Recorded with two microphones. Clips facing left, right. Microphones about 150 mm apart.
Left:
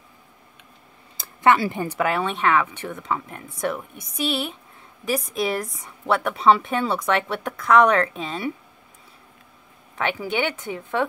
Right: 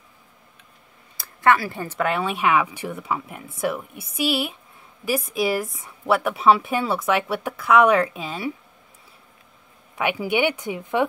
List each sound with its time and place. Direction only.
1.1 s a sound: 20° left (ahead or behind)
2.0 s speech: centre (ahead or behind)
9.9 s speech: 10° right (ahead or behind)